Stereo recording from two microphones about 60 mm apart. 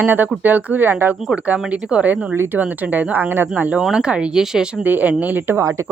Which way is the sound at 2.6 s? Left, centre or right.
Right.